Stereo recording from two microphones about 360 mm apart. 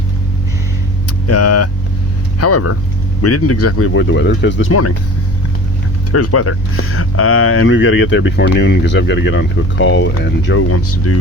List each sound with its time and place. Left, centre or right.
1.3 s speech: left
6.1 s speech: left